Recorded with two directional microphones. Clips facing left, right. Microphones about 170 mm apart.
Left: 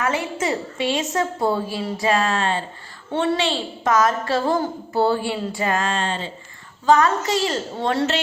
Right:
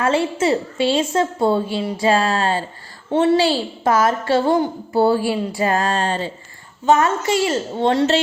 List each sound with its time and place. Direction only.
0.0 s a woman's voice: 30° right (ahead or behind)
5.5 s a sound: 30° right (ahead or behind)
6.8 s a woman's voice: 25° right (ahead or behind)